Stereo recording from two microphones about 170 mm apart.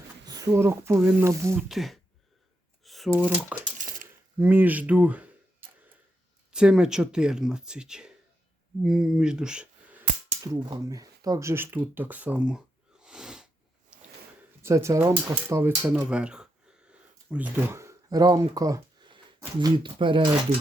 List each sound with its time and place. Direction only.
0.3 s speech: 20° right (ahead or behind)
1.5 s speech: centre (ahead or behind)
2.8 s a sound: centre (ahead or behind)
3.1 s speech: 10° right (ahead or behind)
3.8 s coin: 55° right (ahead or behind)
4.4 s speech: 10° right (ahead or behind)
6.5 s speech: 5° right (ahead or behind)
10.4 s speech: 20° right (ahead or behind); by 13.5 s 5° right (ahead or behind)
14.6 s speech: 15° right (ahead or behind)
15.4 s a sound: 15° right (ahead or behind)
19.5 s speech: 30° right (ahead or behind)